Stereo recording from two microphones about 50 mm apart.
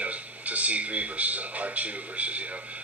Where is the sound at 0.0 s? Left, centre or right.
Right.